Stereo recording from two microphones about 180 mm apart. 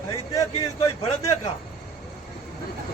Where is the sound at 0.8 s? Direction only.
30° left (ahead or behind).